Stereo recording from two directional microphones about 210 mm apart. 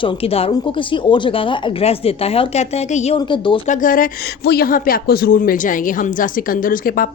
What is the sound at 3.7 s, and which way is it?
Speech, 40° left (ahead or behind).